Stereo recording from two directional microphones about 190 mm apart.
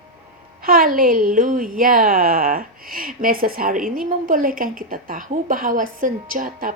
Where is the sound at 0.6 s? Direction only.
50° right (ahead or behind).